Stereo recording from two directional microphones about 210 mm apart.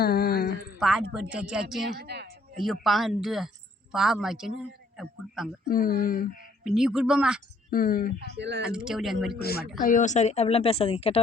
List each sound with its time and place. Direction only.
0.0 s a sound: 50° left (ahead or behind)
0.8 s speech: 5° right (ahead or behind)
2.0 s speech: 50° right (ahead or behind)
2.8 s speech: centre (ahead or behind)
5.6 s speech: 45° left (ahead or behind)
6.7 s speech: 5° right (ahead or behind)
7.7 s speech: 40° left (ahead or behind)
8.4 s speech: 55° right (ahead or behind)
8.7 s speech: centre (ahead or behind)
9.8 s speech: 35° left (ahead or behind)